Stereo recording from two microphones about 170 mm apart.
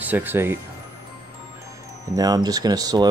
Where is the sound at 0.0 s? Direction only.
10° right (ahead or behind).